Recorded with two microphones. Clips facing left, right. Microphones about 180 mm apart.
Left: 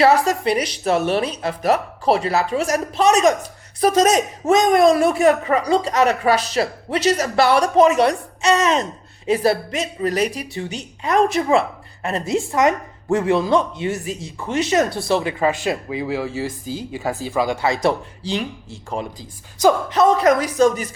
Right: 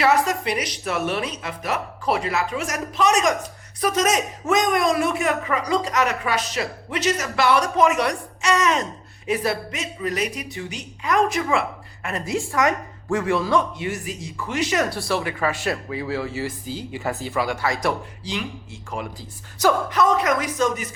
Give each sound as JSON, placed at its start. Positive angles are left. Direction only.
{"t": 0.0, "sound": "a woman's voice", "side_deg": 35}